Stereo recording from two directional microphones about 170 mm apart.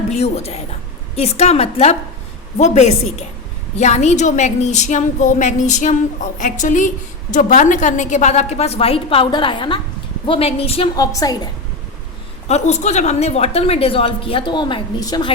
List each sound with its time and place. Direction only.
0.1 s a woman's voice: 40° left (ahead or behind)
10.9 s a woman's voice: 20° left (ahead or behind)
12.5 s a woman's voice: 40° left (ahead or behind)